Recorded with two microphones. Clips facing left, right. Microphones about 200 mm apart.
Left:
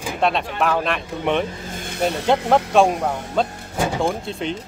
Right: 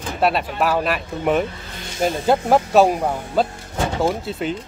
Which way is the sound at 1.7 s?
50° left (ahead or behind).